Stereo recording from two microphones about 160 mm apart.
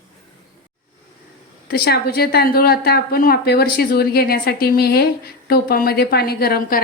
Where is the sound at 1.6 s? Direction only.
75° left (ahead or behind).